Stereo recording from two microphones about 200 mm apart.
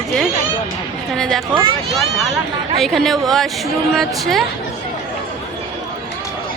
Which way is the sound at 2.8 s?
Centre (ahead or behind).